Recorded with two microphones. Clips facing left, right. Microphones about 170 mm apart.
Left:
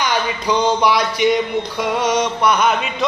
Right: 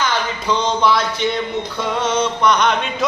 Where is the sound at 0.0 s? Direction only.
10° left (ahead or behind).